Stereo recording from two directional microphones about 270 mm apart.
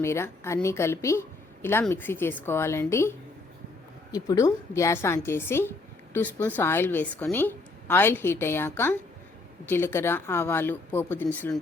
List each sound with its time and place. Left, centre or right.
0.0 s a woman's voice: centre